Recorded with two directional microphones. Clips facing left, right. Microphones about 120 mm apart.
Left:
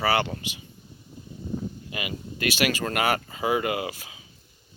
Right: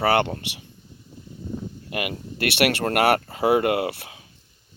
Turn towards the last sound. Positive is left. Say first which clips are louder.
# right 6 dB
turn(degrees=-60)  # may be behind; listen again after turning